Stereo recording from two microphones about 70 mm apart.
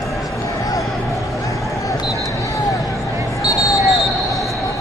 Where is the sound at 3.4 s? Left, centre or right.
Left.